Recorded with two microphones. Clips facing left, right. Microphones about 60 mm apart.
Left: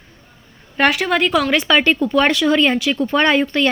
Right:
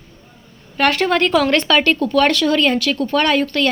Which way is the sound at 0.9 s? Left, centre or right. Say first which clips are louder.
Right 1 dB; centre.